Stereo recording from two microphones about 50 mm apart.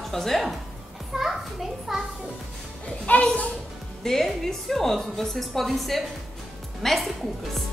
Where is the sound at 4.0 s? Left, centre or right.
Centre.